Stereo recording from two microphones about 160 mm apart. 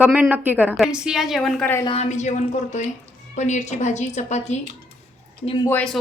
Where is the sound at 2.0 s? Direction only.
50° left (ahead or behind).